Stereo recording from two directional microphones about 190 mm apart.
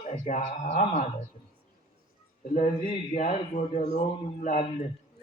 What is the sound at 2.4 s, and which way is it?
Speech, 45° left (ahead or behind).